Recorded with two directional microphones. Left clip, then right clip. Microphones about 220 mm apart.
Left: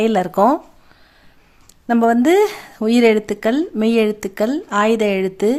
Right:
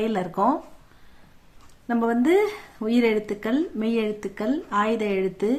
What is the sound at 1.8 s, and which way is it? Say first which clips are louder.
Speech: left 8 dB; 45° left (ahead or behind).